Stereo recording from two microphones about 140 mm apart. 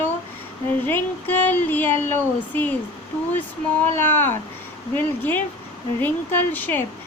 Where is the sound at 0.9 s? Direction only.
15° left (ahead or behind).